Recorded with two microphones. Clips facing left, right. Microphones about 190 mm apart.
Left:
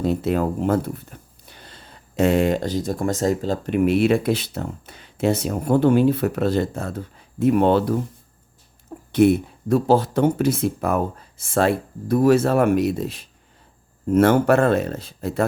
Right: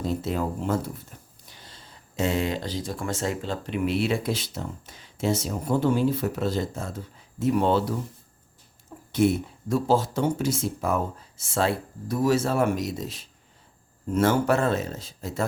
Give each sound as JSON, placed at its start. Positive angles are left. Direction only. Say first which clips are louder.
{"t": 0.0, "sound": "speech", "louder": "left 6 dB", "side_deg": 60}
{"t": 9.1, "sound": "speech", "louder": "left 6 dB", "side_deg": 60}